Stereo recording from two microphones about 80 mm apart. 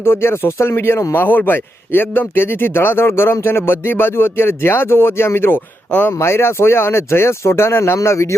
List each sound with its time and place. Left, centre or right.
0.0 s a man's voice: left